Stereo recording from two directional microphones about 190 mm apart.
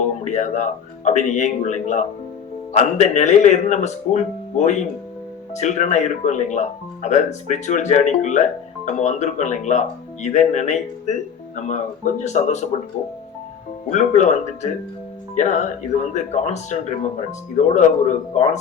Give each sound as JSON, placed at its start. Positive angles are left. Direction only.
{"t": 0.3, "sound": "speech", "side_deg": 40}
{"t": 13.9, "sound": "speech", "side_deg": 40}